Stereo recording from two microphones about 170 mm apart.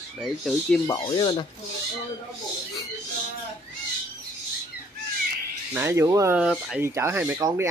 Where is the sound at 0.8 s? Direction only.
25° left (ahead or behind).